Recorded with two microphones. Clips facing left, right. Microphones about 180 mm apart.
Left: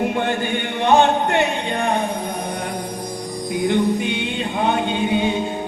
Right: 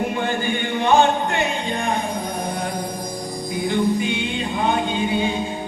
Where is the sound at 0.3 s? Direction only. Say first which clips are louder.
Left 1 dB; 65° left (ahead or behind).